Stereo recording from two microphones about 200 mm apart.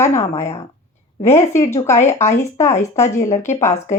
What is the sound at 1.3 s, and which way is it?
Speech, 15° left (ahead or behind).